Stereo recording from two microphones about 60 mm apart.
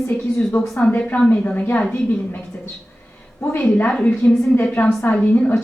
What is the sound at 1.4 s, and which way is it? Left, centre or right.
Speech, left.